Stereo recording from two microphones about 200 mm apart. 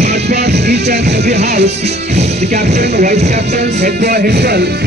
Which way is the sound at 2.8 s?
50° right (ahead or behind).